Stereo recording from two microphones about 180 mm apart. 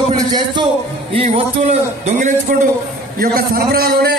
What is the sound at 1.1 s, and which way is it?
Music, 30° right (ahead or behind).